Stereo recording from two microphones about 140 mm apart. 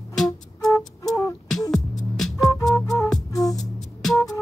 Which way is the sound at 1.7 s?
5° left (ahead or behind).